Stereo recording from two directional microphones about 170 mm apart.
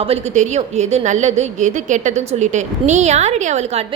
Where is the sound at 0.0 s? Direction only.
35° right (ahead or behind).